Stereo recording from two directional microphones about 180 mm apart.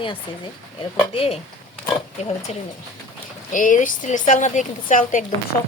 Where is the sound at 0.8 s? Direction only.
30° left (ahead or behind).